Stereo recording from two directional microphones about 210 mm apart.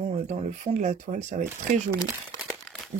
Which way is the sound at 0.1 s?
35° right (ahead or behind).